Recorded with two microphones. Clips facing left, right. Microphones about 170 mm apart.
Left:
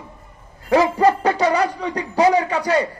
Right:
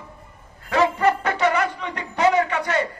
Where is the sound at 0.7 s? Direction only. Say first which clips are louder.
Left 4 dB; 35° left (ahead or behind).